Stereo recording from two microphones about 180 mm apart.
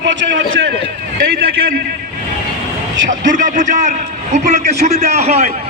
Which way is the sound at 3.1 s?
45° right (ahead or behind).